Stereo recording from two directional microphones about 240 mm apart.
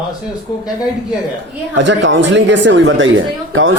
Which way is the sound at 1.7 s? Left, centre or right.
Right.